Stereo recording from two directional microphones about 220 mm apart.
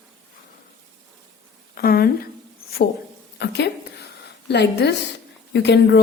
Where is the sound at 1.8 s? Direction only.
45° left (ahead or behind).